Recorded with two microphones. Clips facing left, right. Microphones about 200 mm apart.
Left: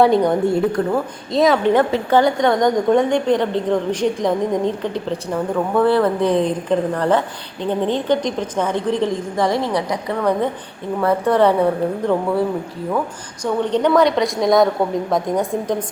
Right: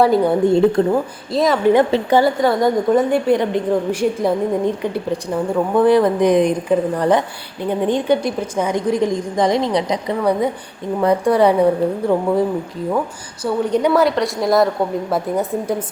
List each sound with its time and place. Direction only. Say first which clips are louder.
0.0 s a woman's voice: even; 5° right (ahead or behind)
0.8 s a woman's voice: right 4 dB; 25° right (ahead or behind)
1.3 s a woman's voice: even; centre (ahead or behind)
13.4 s a woman's voice: right 1 dB; 10° right (ahead or behind)